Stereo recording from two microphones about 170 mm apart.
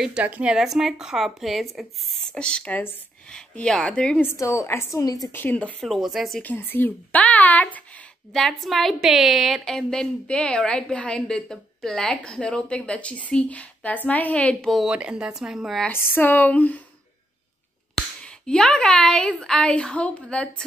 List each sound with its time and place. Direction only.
0.0 s a woman's voice: 5° right (ahead or behind)
4.4 s a woman's voice: 15° left (ahead or behind); by 15.9 s centre (ahead or behind)
15.9 s speech: 10° left (ahead or behind)
17.9 s speech: 5° left (ahead or behind)